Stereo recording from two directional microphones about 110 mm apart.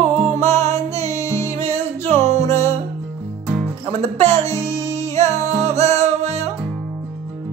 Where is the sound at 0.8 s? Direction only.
25° left (ahead or behind).